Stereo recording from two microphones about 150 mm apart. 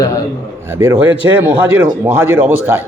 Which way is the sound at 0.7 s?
15° right (ahead or behind).